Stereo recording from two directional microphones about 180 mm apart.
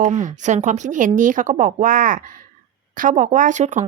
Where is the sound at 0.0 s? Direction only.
45° right (ahead or behind).